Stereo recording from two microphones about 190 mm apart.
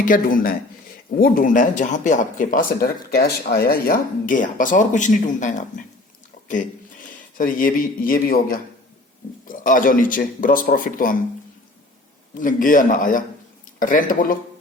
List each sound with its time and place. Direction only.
0.0 s speech: 50° left (ahead or behind)
7.3 s speech: 45° left (ahead or behind)
12.3 s speech: 45° left (ahead or behind)